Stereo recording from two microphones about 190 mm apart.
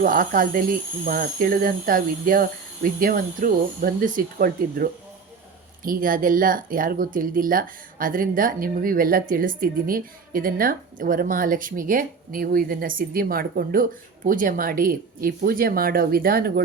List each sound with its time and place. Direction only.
0.0 s speech: 50° right (ahead or behind)